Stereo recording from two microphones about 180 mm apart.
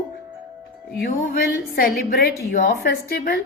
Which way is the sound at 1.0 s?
55° left (ahead or behind).